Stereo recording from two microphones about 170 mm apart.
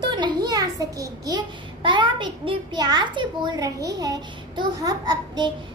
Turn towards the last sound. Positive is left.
turn(degrees=-25)  # may be behind; listen again after turning